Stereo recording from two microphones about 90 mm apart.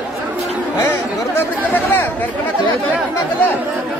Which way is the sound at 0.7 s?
30° left (ahead or behind).